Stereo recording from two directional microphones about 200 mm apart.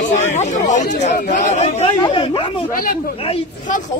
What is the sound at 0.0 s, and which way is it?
Speech, 35° left (ahead or behind).